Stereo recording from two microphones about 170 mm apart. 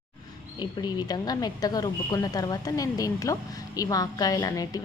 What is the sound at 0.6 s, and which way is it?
A woman's voice, 25° left (ahead or behind).